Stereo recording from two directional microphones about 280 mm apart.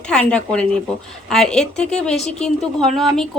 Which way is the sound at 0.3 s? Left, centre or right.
Centre.